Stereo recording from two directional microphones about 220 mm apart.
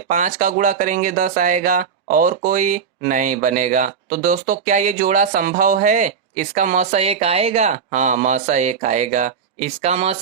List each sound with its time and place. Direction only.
0.1 s speech: 35° right (ahead or behind)